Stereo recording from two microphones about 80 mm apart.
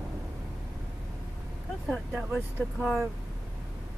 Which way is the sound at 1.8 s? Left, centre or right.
Centre.